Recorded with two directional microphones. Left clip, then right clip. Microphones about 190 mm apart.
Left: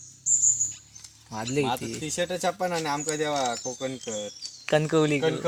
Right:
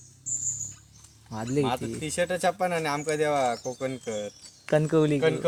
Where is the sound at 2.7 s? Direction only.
20° right (ahead or behind).